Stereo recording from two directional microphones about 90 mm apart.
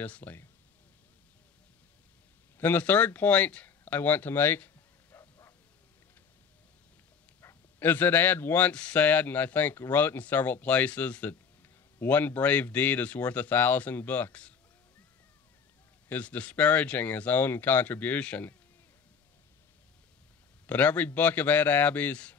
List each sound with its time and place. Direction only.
0.0 s speech: 20° left (ahead or behind)
2.6 s speech: 20° left (ahead or behind)
5.1 s a sound: 30° left (ahead or behind)
7.4 s speech: 25° left (ahead or behind)
16.1 s speech: 15° left (ahead or behind)
20.6 s a man's voice: 20° left (ahead or behind)